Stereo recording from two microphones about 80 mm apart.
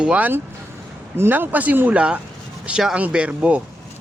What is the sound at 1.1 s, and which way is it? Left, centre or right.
Speech, right.